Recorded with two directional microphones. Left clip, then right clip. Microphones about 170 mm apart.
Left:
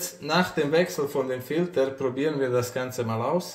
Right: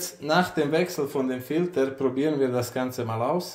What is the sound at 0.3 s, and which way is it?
Speech, 35° right (ahead or behind).